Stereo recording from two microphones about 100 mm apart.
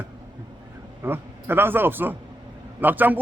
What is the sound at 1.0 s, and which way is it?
A man's voice, 20° right (ahead or behind).